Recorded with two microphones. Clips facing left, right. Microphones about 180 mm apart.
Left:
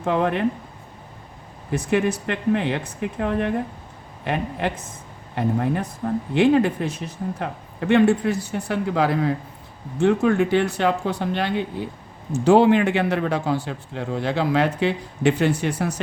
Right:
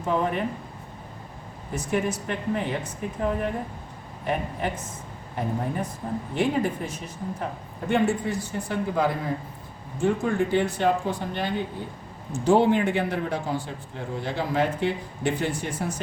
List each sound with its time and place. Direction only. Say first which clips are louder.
0.0 s speech: left 4 dB; 75° left (ahead or behind)
1.7 s a man's voice: left 5 dB; 70° left (ahead or behind)